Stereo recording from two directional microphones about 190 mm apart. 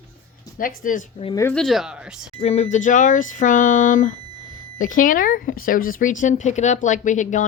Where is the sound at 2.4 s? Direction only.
35° left (ahead or behind).